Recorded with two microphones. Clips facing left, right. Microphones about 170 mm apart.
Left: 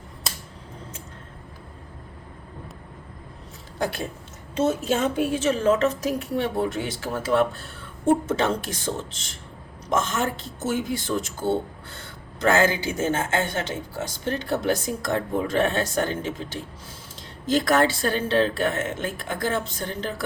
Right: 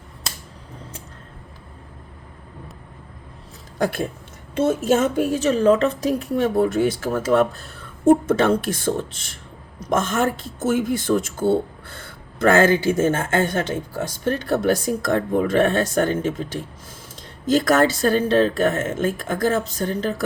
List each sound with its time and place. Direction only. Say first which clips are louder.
3.8 s a woman's voice: right 5 dB; 50° right (ahead or behind)
17.4 s a woman's voice: right 3 dB; 45° right (ahead or behind)